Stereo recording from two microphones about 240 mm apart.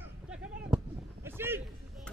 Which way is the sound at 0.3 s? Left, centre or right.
Centre.